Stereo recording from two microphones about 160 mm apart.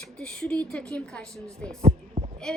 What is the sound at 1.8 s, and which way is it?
Heart sounds, 40° right (ahead or behind).